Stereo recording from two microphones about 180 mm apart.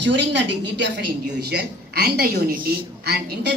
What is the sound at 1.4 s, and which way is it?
A woman's voice, 60° right (ahead or behind).